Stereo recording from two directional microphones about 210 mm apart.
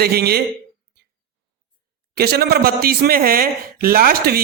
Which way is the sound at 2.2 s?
50° right (ahead or behind).